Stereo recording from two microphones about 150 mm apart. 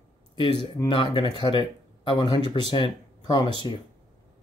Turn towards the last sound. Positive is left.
turn(degrees=30)  # may be behind; listen again after turning